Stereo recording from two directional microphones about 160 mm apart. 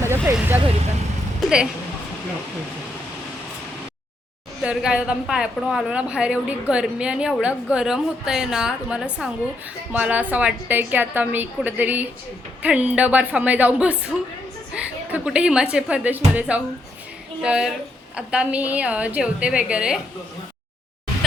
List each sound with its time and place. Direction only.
0.0 s a woman's voice: 15° right (ahead or behind)
4.6 s a woman's voice: 5° right (ahead or behind)